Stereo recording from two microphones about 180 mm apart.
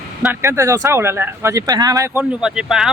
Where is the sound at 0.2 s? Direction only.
10° right (ahead or behind).